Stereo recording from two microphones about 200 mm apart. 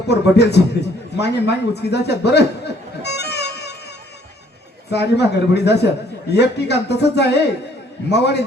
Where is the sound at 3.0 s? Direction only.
55° left (ahead or behind).